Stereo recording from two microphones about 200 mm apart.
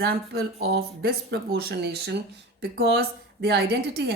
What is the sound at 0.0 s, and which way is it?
A woman's voice, 50° right (ahead or behind).